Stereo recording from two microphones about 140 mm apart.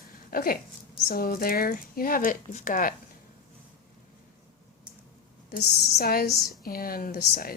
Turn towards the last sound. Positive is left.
turn(degrees=90)